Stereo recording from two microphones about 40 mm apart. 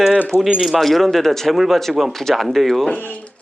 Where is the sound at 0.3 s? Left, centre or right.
Left.